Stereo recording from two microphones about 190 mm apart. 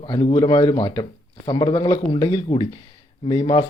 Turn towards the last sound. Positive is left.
turn(degrees=25)  # may be behind; listen again after turning